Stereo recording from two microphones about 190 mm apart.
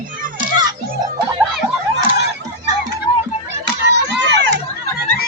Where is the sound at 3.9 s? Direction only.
65° right (ahead or behind).